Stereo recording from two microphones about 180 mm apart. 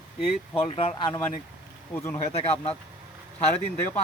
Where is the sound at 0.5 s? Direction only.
30° left (ahead or behind).